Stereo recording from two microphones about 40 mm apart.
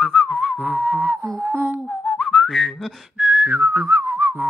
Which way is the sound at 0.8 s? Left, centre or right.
Right.